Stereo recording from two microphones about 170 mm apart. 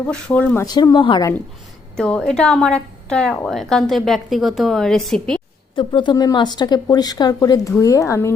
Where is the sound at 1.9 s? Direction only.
5° left (ahead or behind).